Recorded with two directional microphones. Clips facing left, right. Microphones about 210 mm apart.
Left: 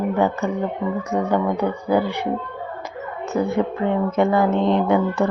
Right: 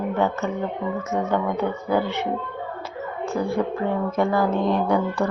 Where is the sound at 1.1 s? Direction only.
15° left (ahead or behind).